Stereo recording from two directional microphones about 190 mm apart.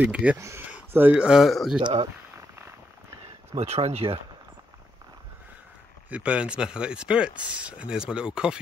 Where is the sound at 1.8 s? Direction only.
25° right (ahead or behind).